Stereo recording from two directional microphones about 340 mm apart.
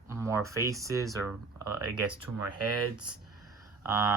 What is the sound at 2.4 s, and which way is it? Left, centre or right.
Speech, right.